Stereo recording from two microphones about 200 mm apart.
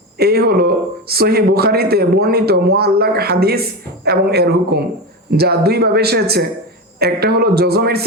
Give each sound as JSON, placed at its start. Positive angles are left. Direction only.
{"t": 0.2, "sound": "speech", "side_deg": -50}